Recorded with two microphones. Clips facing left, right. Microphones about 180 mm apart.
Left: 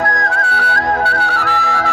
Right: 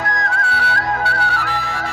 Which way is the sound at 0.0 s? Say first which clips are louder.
Left 4 dB; 50° left (ahead or behind).